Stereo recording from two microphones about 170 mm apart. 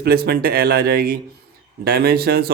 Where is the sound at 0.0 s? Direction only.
65° right (ahead or behind).